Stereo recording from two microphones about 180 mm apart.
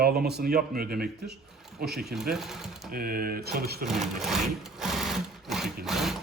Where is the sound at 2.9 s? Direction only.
55° right (ahead or behind).